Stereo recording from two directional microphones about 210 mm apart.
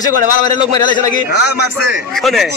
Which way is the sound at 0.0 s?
20° left (ahead or behind).